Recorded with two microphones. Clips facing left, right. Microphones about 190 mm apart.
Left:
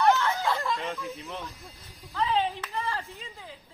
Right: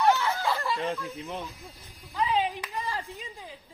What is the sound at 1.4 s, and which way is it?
Speech, 15° right (ahead or behind).